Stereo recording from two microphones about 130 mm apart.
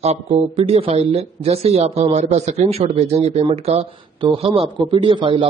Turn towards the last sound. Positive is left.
turn(degrees=-40)  # may be behind; listen again after turning